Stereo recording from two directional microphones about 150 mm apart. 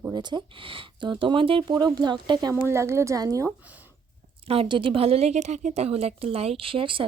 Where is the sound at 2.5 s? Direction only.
15° right (ahead or behind).